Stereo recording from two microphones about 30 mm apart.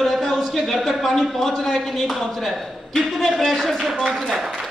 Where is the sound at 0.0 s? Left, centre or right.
Centre.